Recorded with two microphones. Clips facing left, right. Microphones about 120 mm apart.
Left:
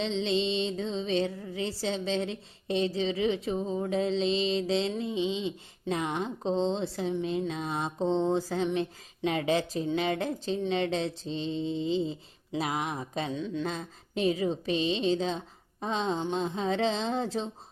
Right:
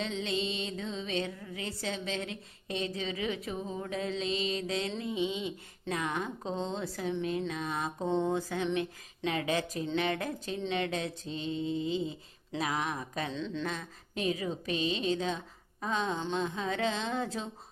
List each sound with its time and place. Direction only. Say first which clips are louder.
0.0 s music: left 5 dB; 25° left (ahead or behind)
9.9 s speech: left 2 dB; 15° left (ahead or behind)
10.2 s music: left 5 dB; 25° left (ahead or behind)
12.7 s music: left 2 dB; 20° left (ahead or behind)
13.3 s speech: left 3 dB; 10° left (ahead or behind)
13.7 s music: left 3 dB; 30° left (ahead or behind)